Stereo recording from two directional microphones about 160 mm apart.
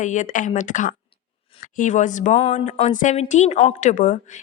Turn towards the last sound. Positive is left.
turn(degrees=50)  # may be behind; listen again after turning